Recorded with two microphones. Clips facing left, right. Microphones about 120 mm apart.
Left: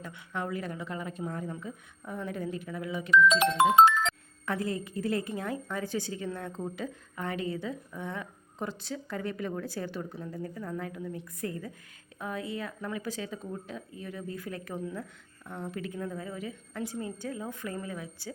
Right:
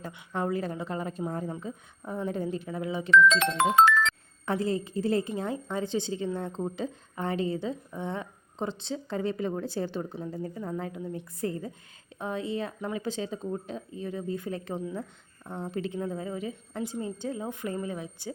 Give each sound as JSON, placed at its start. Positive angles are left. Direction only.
{"t": 0.3, "sound": "a woman's voice", "side_deg": -30}
{"t": 4.4, "sound": "a woman's voice", "side_deg": -30}